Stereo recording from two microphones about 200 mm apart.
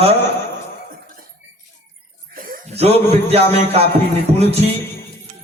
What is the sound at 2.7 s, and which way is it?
Speech, 30° right (ahead or behind).